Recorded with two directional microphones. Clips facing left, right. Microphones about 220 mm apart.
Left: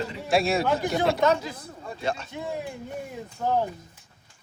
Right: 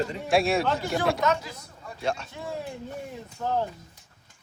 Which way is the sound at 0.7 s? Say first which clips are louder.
Left 2 dB; 20° left (ahead or behind).